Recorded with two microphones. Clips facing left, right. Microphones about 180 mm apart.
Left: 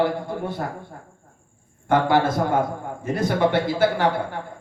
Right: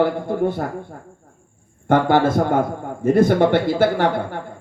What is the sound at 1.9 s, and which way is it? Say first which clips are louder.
A man's voice: right 3 dB; 50° right (ahead or behind).